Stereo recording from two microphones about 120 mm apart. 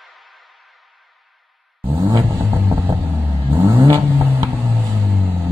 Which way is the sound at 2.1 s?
25° right (ahead or behind).